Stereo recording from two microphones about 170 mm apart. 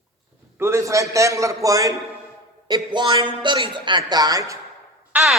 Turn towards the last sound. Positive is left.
turn(degrees=-10)  # may be behind; listen again after turning